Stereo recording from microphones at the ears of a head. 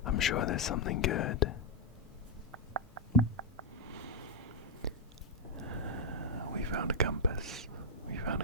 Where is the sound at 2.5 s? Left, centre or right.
Right.